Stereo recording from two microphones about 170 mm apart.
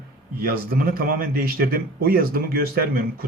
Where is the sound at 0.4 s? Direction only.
60° right (ahead or behind).